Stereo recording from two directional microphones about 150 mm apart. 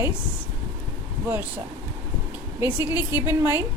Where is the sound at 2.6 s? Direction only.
15° right (ahead or behind).